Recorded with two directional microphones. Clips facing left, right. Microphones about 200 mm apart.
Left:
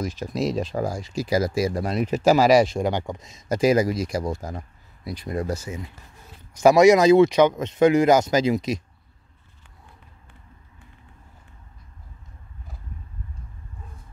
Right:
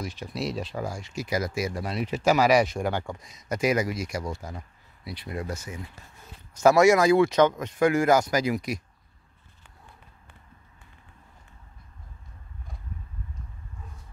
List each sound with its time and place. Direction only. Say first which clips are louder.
0.3 s speech: left 6 dB; 40° left (ahead or behind)
6.5 s speech: left 4 dB; 15° left (ahead or behind)